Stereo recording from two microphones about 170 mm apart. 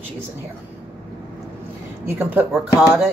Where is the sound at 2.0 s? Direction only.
10° right (ahead or behind).